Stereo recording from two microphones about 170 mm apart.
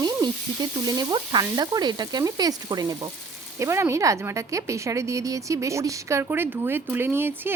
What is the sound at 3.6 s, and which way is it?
A woman's voice, 15° right (ahead or behind).